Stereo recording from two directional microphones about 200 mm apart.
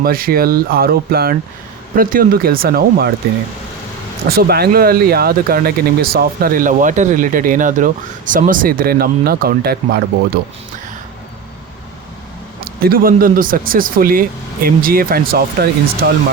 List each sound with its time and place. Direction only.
0.0 s speech: 45° right (ahead or behind)
4.3 s speech: 50° right (ahead or behind)
12.5 s speech: 50° right (ahead or behind)